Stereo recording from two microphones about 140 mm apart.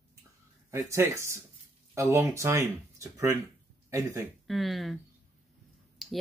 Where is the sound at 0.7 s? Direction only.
20° right (ahead or behind).